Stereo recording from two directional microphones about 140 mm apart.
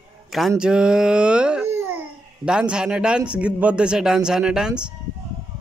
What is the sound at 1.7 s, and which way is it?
Babbling, 15° right (ahead or behind).